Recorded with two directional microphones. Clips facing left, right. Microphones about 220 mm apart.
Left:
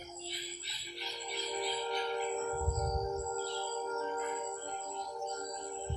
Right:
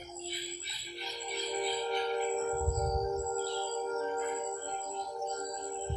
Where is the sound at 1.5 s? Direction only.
30° right (ahead or behind).